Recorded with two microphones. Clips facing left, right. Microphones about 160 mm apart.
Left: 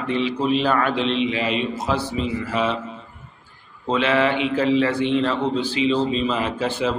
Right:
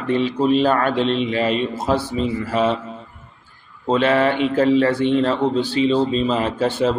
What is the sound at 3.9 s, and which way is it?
A man's voice, 40° right (ahead or behind).